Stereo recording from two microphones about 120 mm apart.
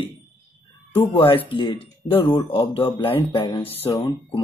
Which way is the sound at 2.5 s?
45° left (ahead or behind).